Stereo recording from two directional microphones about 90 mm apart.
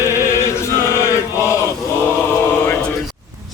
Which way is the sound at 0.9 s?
30° left (ahead or behind).